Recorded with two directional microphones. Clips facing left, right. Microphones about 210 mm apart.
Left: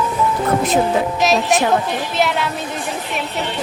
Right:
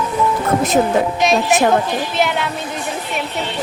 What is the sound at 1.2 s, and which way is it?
Speech, centre (ahead or behind).